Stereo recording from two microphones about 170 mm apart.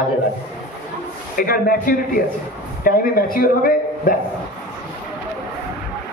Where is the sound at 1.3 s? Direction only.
55° left (ahead or behind).